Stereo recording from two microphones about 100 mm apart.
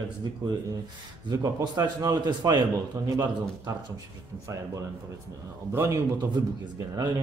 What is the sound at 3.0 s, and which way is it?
Speech, 30° right (ahead or behind).